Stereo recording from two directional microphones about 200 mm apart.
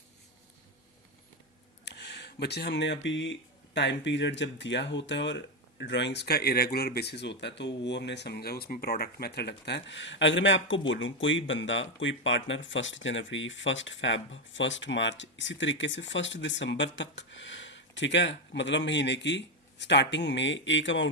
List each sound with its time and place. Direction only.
1.8 s speech: 55° left (ahead or behind)